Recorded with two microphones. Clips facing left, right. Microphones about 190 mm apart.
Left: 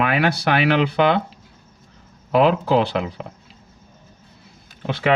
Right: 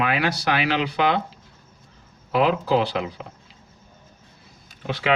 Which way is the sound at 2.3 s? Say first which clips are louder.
Left 3 dB; 55° left (ahead or behind).